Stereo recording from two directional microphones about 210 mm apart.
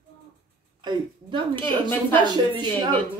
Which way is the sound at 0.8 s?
20° right (ahead or behind).